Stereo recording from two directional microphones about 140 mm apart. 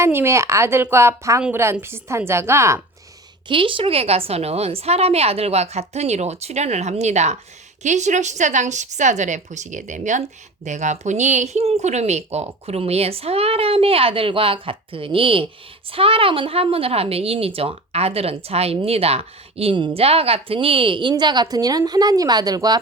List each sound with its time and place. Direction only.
0.0 s speech: 15° right (ahead or behind)
3.5 s a woman's voice: 40° right (ahead or behind)